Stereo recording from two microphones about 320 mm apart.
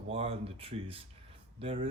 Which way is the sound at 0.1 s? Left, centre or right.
Centre.